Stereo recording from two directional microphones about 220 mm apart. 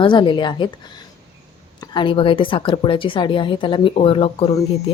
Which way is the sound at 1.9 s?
25° left (ahead or behind).